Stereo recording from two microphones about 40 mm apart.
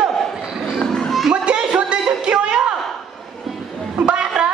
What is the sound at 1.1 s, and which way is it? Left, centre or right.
Children playing, centre.